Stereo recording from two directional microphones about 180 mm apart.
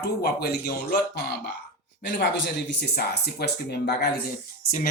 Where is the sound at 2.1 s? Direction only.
70° left (ahead or behind).